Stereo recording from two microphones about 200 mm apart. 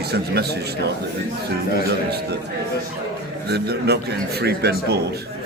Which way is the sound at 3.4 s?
55° right (ahead or behind).